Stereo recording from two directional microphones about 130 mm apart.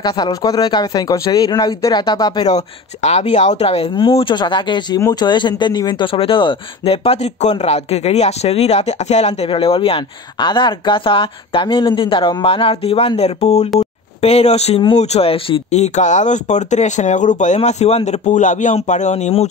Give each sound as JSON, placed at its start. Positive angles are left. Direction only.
{"t": 0.0, "sound": "speech", "side_deg": 30}
{"t": 3.0, "sound": "speech", "side_deg": 60}
{"t": 17.6, "sound": "speech", "side_deg": 55}